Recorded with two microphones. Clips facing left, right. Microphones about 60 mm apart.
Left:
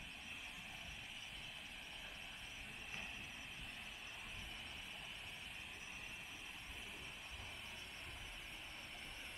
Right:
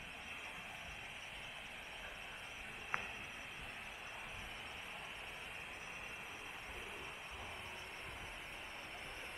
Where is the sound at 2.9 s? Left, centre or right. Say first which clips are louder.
Right 10 dB; right.